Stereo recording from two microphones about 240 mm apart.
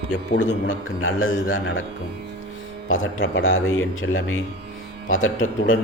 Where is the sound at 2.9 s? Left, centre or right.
Left.